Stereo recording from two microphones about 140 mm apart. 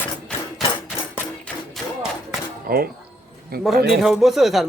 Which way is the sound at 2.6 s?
90° right.